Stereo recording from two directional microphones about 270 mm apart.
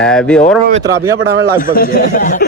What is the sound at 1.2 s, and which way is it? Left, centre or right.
Speech, right.